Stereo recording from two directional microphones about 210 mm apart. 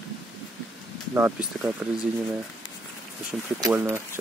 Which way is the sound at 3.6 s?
10° right (ahead or behind).